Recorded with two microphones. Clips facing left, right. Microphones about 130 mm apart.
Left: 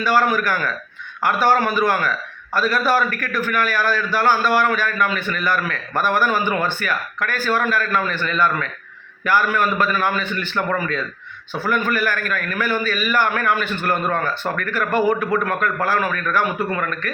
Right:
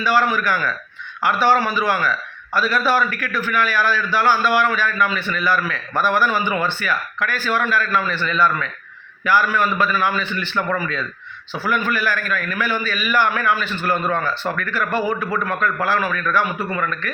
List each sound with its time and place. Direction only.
0.0 s a man's voice: 45° left (ahead or behind)